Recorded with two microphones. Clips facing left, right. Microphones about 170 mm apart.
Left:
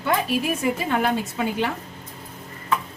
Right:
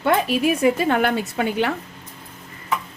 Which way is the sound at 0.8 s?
70° right (ahead or behind).